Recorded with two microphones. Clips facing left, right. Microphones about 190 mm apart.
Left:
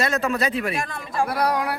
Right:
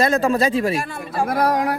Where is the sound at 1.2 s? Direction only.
50° right (ahead or behind).